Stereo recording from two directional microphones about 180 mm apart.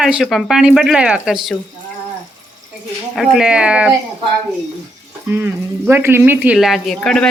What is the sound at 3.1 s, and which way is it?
Speech, centre (ahead or behind).